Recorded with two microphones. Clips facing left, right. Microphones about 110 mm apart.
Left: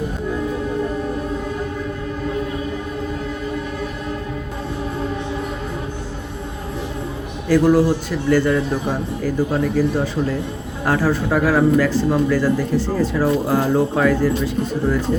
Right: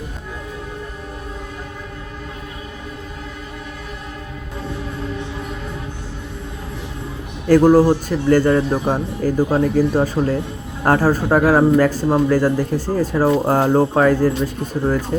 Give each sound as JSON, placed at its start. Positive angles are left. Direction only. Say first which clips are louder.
{"t": 7.4, "sound": "a man's voice", "louder": "right 3 dB", "side_deg": -45}